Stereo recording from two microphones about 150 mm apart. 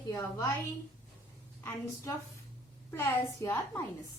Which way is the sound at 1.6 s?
15° left (ahead or behind).